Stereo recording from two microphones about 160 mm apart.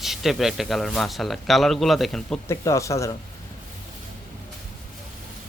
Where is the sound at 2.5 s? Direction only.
20° left (ahead or behind).